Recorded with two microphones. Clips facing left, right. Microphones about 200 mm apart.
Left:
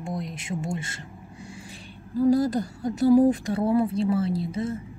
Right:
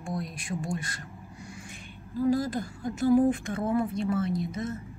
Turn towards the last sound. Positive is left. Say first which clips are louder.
# left 3 dB
turn(degrees=30)  # may be behind; listen again after turning